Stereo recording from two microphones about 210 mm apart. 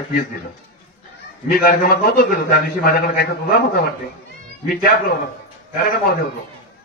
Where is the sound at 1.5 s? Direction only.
45° left (ahead or behind).